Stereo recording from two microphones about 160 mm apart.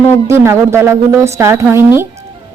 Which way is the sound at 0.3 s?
15° right (ahead or behind).